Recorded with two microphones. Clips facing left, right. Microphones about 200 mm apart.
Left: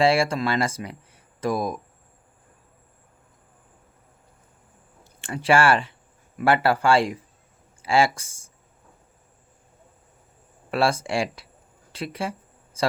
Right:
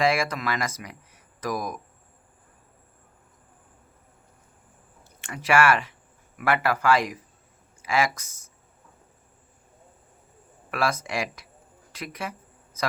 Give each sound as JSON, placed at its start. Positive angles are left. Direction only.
{"t": 0.0, "sound": "speech", "side_deg": 30}
{"t": 5.2, "sound": "speech", "side_deg": 30}
{"t": 10.7, "sound": "speech", "side_deg": 30}
{"t": 12.7, "sound": "a sound", "side_deg": 30}